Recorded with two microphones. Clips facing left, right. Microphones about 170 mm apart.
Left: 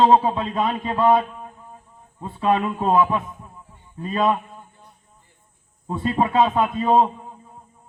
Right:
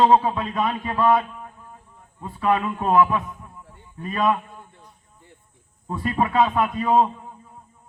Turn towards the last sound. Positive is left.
turn(degrees=25)  # may be behind; listen again after turning